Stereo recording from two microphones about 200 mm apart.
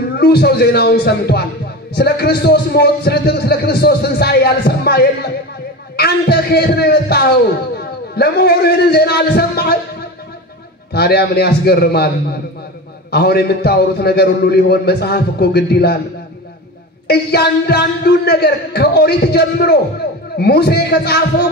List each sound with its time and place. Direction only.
0.2 s a man's voice: 55° left (ahead or behind)
10.9 s a man's voice: 55° left (ahead or behind)
17.1 s a man's voice: 55° left (ahead or behind)